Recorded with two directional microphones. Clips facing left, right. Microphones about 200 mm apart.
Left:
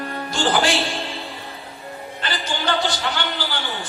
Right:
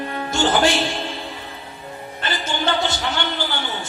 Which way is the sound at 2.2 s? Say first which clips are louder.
Right 2 dB; 25° right (ahead or behind).